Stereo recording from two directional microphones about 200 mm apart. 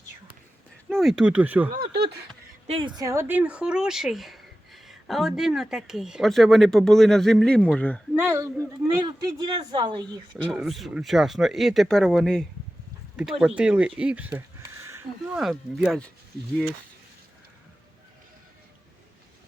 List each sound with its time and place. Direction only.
0.9 s speech: centre (ahead or behind)
2.6 s speech: 25° right (ahead or behind); by 8.0 s 5° left (ahead or behind)
8.1 s speech: 10° right (ahead or behind)
10.5 s speech: centre (ahead or behind)